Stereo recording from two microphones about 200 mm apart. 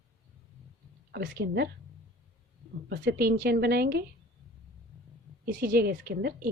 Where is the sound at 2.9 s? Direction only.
55° right (ahead or behind).